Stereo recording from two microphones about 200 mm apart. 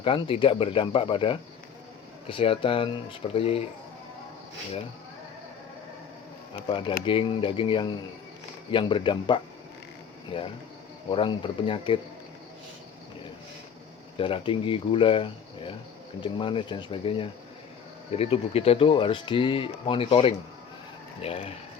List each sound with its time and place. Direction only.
0.0 s speech: 25° left (ahead or behind)
6.5 s speech: 25° left (ahead or behind)
14.2 s speech: 25° left (ahead or behind)